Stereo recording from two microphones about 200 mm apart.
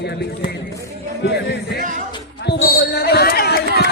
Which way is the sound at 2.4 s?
55° left (ahead or behind).